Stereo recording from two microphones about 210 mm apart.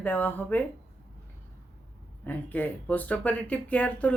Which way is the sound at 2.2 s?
10° left (ahead or behind).